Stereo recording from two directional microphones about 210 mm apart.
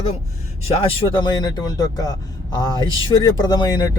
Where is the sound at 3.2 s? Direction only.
20° left (ahead or behind).